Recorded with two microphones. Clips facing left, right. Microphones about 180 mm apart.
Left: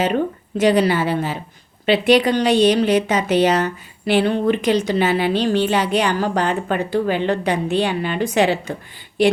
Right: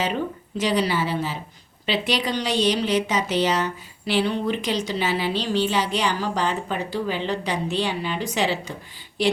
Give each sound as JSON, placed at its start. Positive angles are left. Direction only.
{"t": 0.0, "sound": "a woman's voice", "side_deg": 55}